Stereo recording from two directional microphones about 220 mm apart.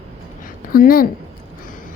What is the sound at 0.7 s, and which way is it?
Speech, 40° left (ahead or behind).